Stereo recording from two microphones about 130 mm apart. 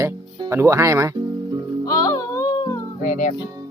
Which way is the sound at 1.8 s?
25° left (ahead or behind).